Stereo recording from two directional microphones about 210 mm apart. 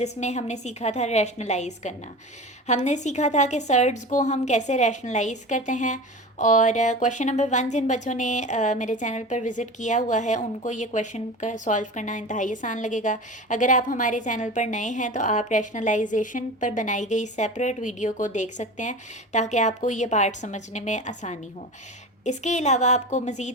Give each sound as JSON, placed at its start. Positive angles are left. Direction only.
{"t": 0.0, "sound": "a woman's voice", "side_deg": 30}